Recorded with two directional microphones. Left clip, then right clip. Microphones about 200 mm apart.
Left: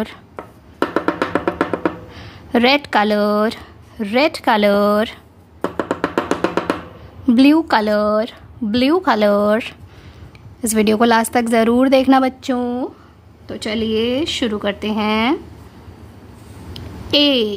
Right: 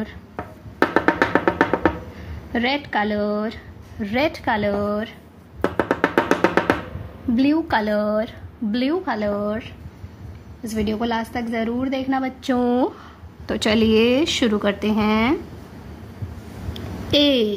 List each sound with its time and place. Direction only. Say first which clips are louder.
0.9 s music: right 1 dB; centre (ahead or behind)
2.1 s speech: left 8 dB; 35° left (ahead or behind)
4.0 s speech: left 6 dB; 25° left (ahead or behind); by 5.1 s 45° left (ahead or behind)
5.6 s music: right 1 dB; 5° left (ahead or behind)
7.3 s a woman's voice: left 6 dB; 35° left (ahead or behind)
12.5 s speech: right 2 dB; centre (ahead or behind)
17.1 s a woman's voice: left 3 dB; 10° left (ahead or behind)